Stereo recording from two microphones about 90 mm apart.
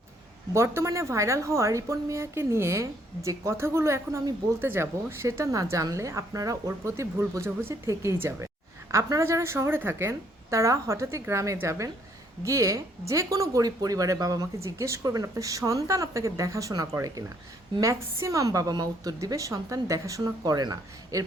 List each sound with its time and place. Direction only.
0.5 s a woman's voice: 30° right (ahead or behind)